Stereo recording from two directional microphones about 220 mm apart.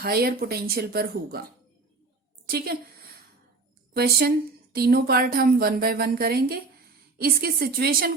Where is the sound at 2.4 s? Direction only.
45° right (ahead or behind).